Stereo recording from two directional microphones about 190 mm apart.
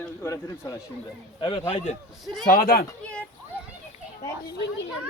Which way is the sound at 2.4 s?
50° left (ahead or behind).